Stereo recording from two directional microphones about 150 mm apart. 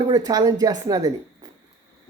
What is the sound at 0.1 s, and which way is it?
Speech, 25° right (ahead or behind).